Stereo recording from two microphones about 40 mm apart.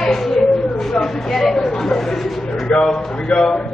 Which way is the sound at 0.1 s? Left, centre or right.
Centre.